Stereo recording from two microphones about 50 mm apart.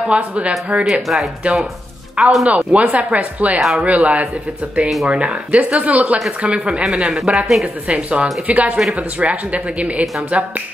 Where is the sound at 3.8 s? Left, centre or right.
Right.